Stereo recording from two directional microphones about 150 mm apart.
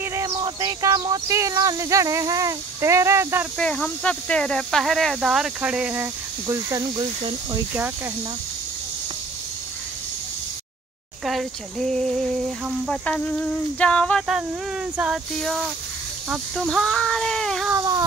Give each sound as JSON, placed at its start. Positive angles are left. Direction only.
{"t": 0.0, "sound": "speech", "side_deg": -20}
{"t": 3.5, "sound": "speech", "side_deg": 5}
{"t": 6.4, "sound": "speech", "side_deg": -25}
{"t": 11.2, "sound": "speech", "side_deg": 0}
{"t": 17.6, "sound": "speech", "side_deg": -20}